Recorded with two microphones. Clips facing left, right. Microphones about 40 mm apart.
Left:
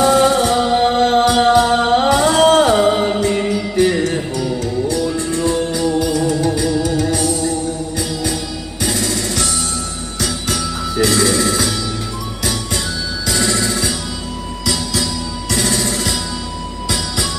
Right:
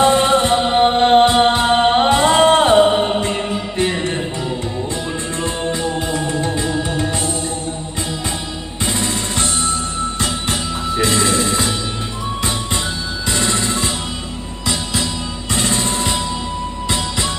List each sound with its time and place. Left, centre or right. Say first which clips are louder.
0.0 s music: left 1 dB; right
5.4 s music: left 3 dB; right
8.8 s music: left 1 dB; right
11.0 s vehicle: left 2 dB; right
13.3 s music: left 1 dB; right